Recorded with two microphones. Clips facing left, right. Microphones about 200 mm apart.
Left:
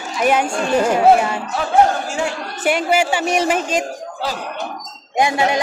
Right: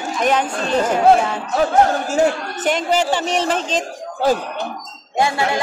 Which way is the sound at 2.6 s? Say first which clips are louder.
Left 1 dB; 10° left (ahead or behind).